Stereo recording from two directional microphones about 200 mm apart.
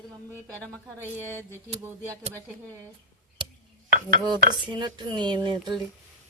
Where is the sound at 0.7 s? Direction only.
10° left (ahead or behind).